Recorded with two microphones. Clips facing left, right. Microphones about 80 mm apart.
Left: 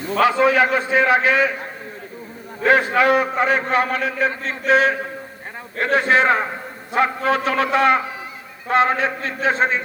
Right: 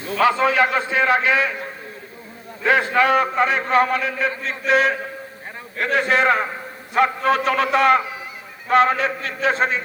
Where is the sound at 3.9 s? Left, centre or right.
Left.